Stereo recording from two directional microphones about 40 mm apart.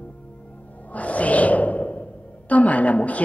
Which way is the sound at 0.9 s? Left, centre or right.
Left.